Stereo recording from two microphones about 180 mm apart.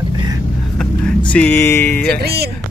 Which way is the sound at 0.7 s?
5° left (ahead or behind).